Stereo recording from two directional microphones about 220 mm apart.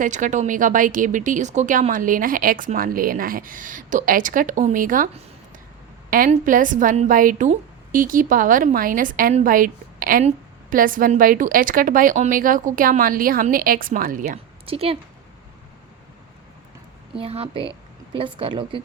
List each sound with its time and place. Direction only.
0.0 s a woman's voice: 35° right (ahead or behind)
6.1 s a woman's voice: 40° right (ahead or behind)
14.7 s a woman's voice: 25° right (ahead or behind)
17.2 s a woman's voice: 25° right (ahead or behind)